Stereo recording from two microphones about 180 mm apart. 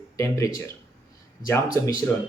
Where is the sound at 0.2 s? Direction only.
15° left (ahead or behind).